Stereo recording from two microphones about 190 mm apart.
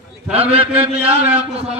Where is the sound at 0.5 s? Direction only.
30° right (ahead or behind).